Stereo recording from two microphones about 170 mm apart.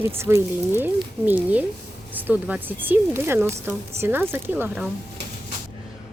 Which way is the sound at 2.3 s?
10° right (ahead or behind).